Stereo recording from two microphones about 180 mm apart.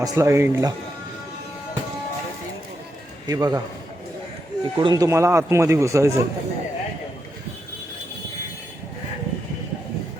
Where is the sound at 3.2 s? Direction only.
20° right (ahead or behind).